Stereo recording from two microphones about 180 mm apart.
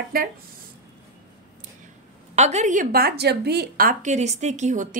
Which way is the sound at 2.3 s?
40° right (ahead or behind).